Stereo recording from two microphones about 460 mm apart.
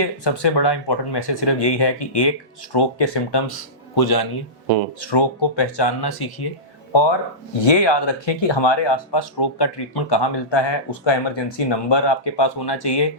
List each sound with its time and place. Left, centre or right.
0.0 s speech: left
7.7 s speech: left